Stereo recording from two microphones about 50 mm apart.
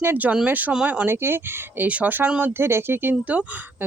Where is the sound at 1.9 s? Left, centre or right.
Right.